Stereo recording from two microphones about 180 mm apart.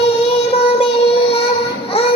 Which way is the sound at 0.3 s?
30° left (ahead or behind).